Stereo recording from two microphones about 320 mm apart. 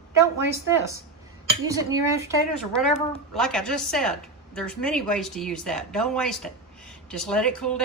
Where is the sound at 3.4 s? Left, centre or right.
Centre.